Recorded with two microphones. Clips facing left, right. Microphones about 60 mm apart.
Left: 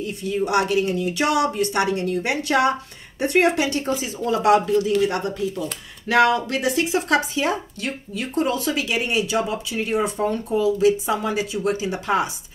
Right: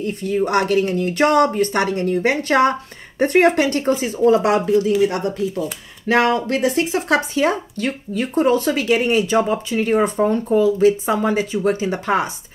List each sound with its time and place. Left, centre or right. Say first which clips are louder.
0.0 s speech: right 4 dB; right
4.2 s speech: right 2 dB; right